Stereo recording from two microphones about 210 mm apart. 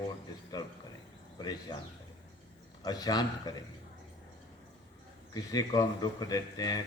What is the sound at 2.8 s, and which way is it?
Speech, 20° left (ahead or behind).